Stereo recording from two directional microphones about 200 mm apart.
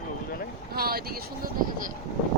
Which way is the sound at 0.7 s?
50° right (ahead or behind).